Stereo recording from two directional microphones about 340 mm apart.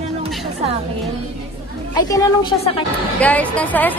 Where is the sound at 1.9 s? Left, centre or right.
Centre.